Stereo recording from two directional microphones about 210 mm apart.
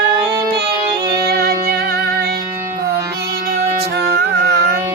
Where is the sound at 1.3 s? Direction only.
45° right (ahead or behind).